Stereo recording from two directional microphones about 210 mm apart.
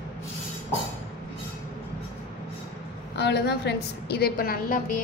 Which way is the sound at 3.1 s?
55° left (ahead or behind).